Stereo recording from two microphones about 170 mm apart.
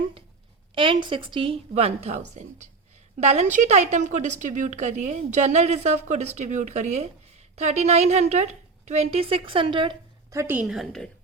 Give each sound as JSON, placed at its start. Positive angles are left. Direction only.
{"t": 0.8, "sound": "a woman's voice", "side_deg": -30}
{"t": 10.3, "sound": "a woman's voice", "side_deg": -10}